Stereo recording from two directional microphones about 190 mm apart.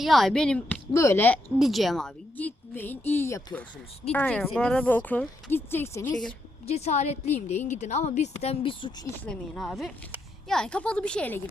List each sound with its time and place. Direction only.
0.0 s a woman's voice: centre (ahead or behind)
1.5 s a woman's voice: centre (ahead or behind)
6.7 s speech: 35° left (ahead or behind)
9.2 s a woman's voice: 5° left (ahead or behind)